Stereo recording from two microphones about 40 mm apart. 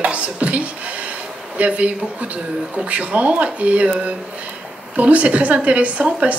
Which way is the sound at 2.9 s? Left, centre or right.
Right.